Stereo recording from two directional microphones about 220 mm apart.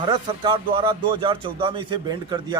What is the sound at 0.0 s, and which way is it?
A man's voice, 20° right (ahead or behind).